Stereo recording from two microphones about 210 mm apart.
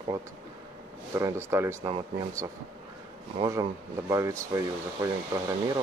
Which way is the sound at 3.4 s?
15° right (ahead or behind).